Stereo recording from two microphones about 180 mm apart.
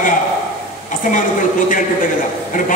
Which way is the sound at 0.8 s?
45° left (ahead or behind).